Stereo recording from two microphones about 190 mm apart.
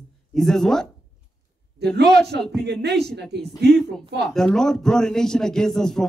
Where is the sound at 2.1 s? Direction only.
60° right (ahead or behind).